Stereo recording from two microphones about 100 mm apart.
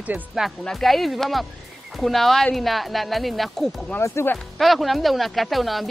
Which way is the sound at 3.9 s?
25° left (ahead or behind).